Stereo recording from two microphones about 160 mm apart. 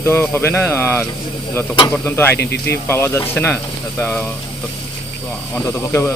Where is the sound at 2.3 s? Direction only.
90° left.